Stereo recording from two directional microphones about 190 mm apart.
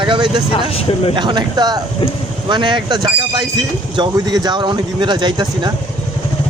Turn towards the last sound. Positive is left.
turn(degrees=-25)  # may be behind; listen again after turning